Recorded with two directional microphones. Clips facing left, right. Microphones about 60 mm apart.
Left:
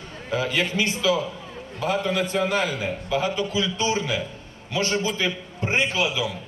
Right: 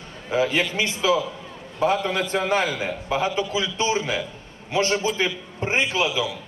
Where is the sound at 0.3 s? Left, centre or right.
Right.